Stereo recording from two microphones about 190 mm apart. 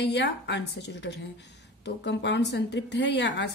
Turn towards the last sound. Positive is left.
turn(degrees=65)  # may be behind; listen again after turning